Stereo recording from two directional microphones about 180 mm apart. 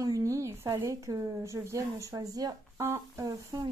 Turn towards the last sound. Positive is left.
turn(degrees=-20)  # may be behind; listen again after turning